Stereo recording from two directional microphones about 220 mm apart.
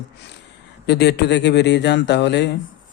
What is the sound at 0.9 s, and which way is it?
Speech, 50° left (ahead or behind).